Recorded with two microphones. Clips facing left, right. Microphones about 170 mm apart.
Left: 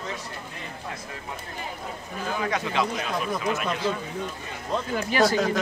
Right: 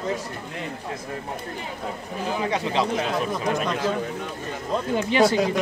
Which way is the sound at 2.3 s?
25° right (ahead or behind).